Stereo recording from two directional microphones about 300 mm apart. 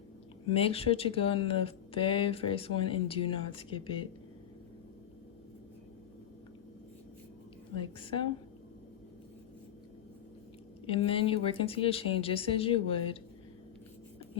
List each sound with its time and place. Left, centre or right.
0.5 s speech: centre
7.8 s speech: centre
10.8 s speech: centre